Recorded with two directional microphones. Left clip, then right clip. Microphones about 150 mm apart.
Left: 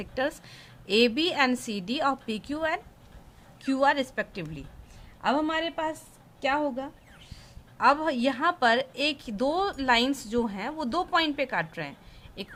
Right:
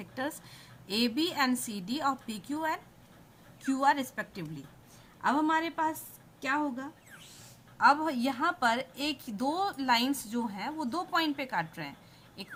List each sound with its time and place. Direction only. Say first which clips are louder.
0.0 s a woman's voice: left 7 dB; 40° left (ahead or behind)